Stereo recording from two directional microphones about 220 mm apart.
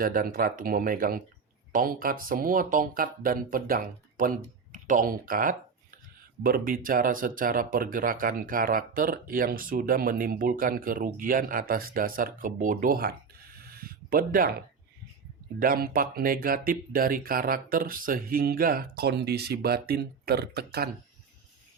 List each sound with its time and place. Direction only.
0.0 s speech: 40° right (ahead or behind)
15.5 s speech: 40° right (ahead or behind)